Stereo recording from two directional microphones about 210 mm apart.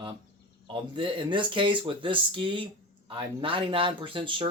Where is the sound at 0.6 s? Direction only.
25° right (ahead or behind).